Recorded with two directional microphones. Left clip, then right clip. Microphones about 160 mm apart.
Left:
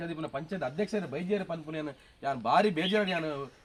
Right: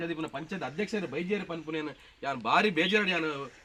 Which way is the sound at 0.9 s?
55° left (ahead or behind).